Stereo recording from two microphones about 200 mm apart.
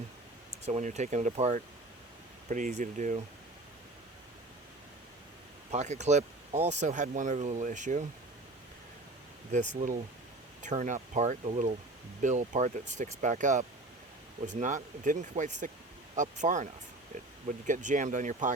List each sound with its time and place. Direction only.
0.6 s speech: 35° right (ahead or behind)
5.7 s speech: 35° right (ahead or behind)
9.5 s speech: 40° right (ahead or behind)
17.7 s speech: 40° right (ahead or behind)